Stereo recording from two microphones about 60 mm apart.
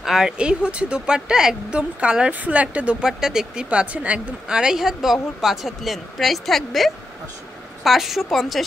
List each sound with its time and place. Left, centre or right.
0.0 s speech: centre
0.4 s speech: centre
3.1 s speech: centre
4.5 s speech: centre